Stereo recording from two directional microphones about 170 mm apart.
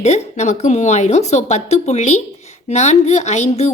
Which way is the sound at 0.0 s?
40° left (ahead or behind).